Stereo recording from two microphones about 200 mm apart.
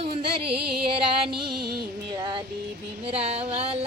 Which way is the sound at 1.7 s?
20° right (ahead or behind).